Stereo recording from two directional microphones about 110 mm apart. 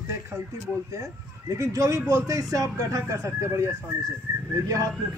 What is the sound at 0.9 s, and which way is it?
Speech, 30° right (ahead or behind).